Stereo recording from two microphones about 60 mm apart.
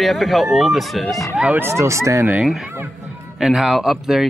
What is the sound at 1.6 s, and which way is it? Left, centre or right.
Speech, right.